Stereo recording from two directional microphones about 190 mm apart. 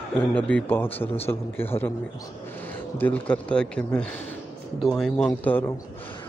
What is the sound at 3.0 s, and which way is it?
Speech, 10° left (ahead or behind).